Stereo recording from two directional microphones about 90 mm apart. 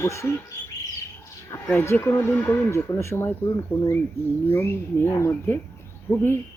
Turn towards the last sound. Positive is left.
turn(degrees=20)  # may be behind; listen again after turning